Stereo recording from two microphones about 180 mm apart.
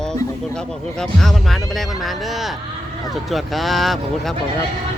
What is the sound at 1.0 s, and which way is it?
Speech, centre (ahead or behind).